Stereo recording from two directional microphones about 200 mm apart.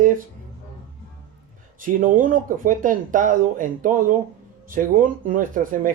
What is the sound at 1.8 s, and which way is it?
Speech, 40° right (ahead or behind).